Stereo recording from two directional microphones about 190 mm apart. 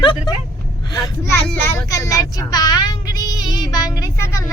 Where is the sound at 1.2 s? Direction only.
10° left (ahead or behind).